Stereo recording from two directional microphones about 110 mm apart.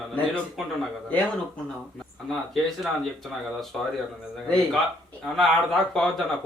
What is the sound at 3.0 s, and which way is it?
Speech, centre (ahead or behind).